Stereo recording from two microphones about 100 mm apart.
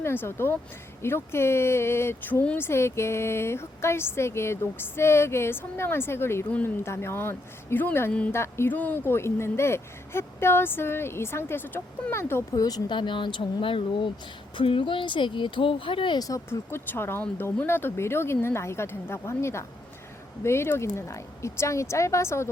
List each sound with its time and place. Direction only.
0.0 s speech: 25° left (ahead or behind)
2.6 s speech: 25° left (ahead or behind)
12.5 s speech: 40° left (ahead or behind); by 16.1 s 60° left (ahead or behind)
16.1 s speech: 40° left (ahead or behind)
16.5 s speech: 25° left (ahead or behind)